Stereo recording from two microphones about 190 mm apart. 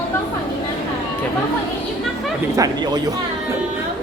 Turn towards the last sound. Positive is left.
turn(degrees=-20)  # may be behind; listen again after turning